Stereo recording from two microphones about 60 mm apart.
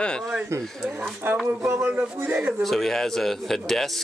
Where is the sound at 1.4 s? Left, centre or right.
Right.